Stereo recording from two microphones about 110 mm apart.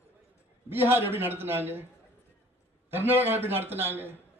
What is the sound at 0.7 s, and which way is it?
A man's voice, 20° right (ahead or behind).